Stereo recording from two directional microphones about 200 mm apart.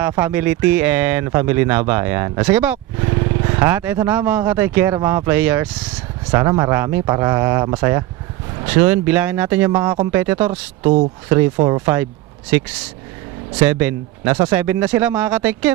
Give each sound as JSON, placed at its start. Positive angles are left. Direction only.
{"t": 0.0, "sound": "speech", "side_deg": -10}
{"t": 9.7, "sound": "speech", "side_deg": -20}
{"t": 11.5, "sound": "speech", "side_deg": -20}